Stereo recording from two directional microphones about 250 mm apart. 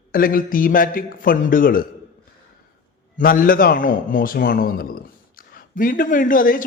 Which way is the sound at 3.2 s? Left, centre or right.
Left.